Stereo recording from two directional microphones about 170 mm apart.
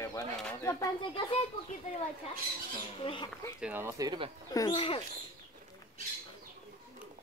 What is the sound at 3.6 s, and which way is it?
Speech, 10° right (ahead or behind).